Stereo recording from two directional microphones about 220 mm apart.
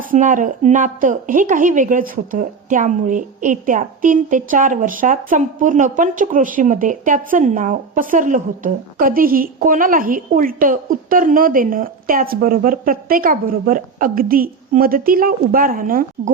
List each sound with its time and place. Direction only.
0.0 s a woman's voice: 35° right (ahead or behind)